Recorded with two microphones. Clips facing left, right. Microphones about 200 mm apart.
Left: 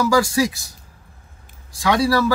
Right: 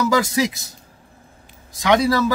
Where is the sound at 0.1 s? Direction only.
20° right (ahead or behind).